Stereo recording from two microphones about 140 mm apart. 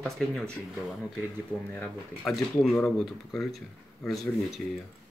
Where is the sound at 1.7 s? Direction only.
5° left (ahead or behind).